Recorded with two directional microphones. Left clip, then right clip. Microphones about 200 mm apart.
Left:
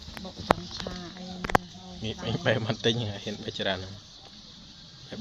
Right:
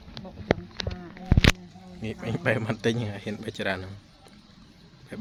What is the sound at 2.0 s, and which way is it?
Speech, 10° right (ahead or behind).